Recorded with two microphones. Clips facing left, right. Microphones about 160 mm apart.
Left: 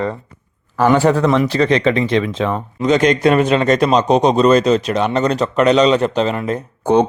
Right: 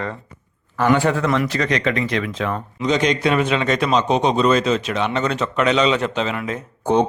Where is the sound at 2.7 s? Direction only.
50° left (ahead or behind).